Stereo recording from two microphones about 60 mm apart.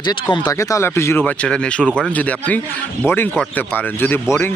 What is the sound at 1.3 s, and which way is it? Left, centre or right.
Speech, centre.